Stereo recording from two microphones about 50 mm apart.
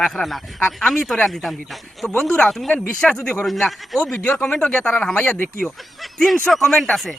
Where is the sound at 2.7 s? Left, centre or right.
Left.